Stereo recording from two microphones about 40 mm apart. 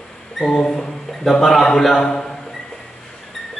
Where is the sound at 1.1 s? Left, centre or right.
Centre.